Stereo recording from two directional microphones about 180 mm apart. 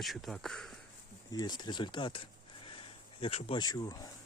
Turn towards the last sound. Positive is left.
turn(degrees=20)  # may be behind; listen again after turning